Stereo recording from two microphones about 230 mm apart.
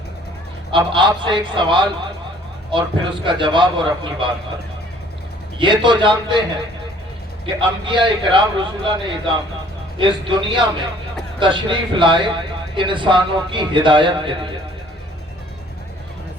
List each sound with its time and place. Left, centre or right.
0.7 s a man's voice: right
5.5 s a man's voice: right
7.4 s a man's voice: right